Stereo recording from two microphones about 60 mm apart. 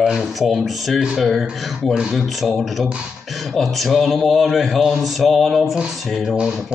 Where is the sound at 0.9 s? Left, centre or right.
Centre.